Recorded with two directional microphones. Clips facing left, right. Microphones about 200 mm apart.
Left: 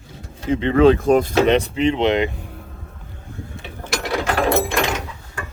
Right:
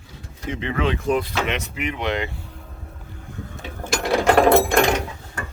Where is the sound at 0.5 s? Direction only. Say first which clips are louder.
Left 11 dB; 35° left (ahead or behind); by 2.5 s 20° left (ahead or behind).